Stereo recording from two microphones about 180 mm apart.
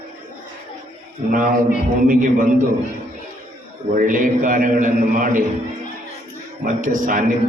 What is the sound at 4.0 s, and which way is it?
A man's voice, 50° right (ahead or behind).